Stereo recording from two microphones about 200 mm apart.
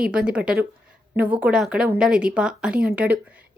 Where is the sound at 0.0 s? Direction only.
5° right (ahead or behind).